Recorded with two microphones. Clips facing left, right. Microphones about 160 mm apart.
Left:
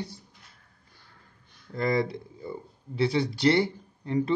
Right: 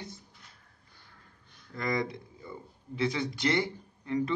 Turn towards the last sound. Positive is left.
turn(degrees=30)  # may be behind; listen again after turning